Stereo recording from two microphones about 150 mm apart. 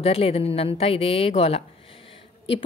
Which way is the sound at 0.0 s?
40° left (ahead or behind).